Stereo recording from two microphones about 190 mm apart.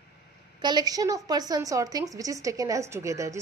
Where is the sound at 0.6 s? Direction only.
20° right (ahead or behind).